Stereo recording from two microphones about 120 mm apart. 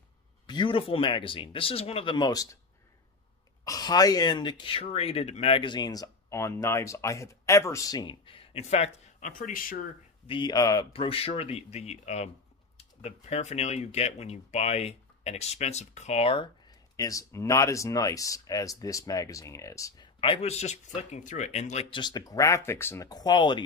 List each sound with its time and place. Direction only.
0.5 s speech: 45° left (ahead or behind)
2.1 s speech: 35° left (ahead or behind)
3.6 s speech: 35° left (ahead or behind); by 9.3 s 65° left (ahead or behind)
10.2 s speech: 40° left (ahead or behind)
10.9 s speech: 50° left (ahead or behind)
16.9 s speech: 30° left (ahead or behind)
20.0 s a sound: 45° left (ahead or behind)
20.4 s speech: 65° left (ahead or behind)
21.9 s speech: 35° left (ahead or behind); by 23.0 s 20° left (ahead or behind)
23.0 s speech: 35° left (ahead or behind)